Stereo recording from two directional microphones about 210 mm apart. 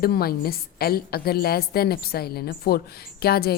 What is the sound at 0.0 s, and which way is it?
A woman's voice, 45° left (ahead or behind).